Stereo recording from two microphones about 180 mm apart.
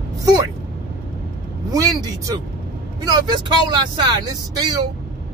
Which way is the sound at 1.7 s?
20° right (ahead or behind).